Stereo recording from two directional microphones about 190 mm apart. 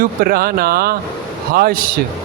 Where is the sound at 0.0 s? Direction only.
50° right (ahead or behind).